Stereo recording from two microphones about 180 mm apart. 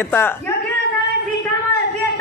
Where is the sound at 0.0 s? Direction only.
10° left (ahead or behind).